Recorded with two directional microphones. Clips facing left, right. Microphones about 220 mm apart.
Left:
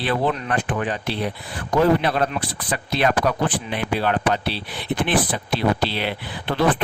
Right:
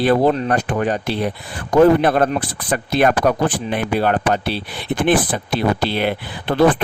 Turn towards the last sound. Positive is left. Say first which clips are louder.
# right 5 dB
turn(degrees=-50)  # may be behind; listen again after turning